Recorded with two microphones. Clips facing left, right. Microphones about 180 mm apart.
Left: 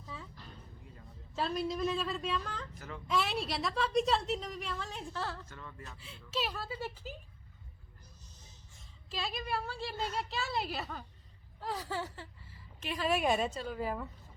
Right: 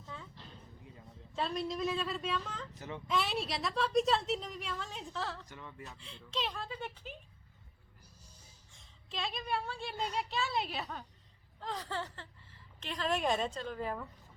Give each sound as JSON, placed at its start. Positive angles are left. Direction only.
{"t": 0.0, "sound": "a sound", "side_deg": 0}
{"t": 1.3, "sound": "a woman's voice", "side_deg": 0}
{"t": 2.7, "sound": "speech", "side_deg": -20}
{"t": 3.1, "sound": "a woman's voice", "side_deg": 0}
{"t": 5.5, "sound": "speech", "side_deg": -15}
{"t": 5.8, "sound": "speech", "side_deg": 0}
{"t": 8.7, "sound": "a woman's voice", "side_deg": 0}